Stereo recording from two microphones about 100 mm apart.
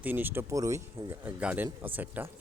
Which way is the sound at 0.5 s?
35° right (ahead or behind).